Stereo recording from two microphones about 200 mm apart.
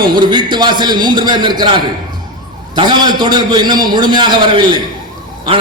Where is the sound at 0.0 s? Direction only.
20° right (ahead or behind).